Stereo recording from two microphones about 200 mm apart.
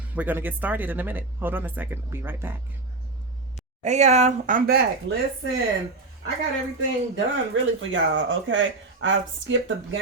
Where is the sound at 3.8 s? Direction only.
35° right (ahead or behind); by 5.2 s 50° right (ahead or behind).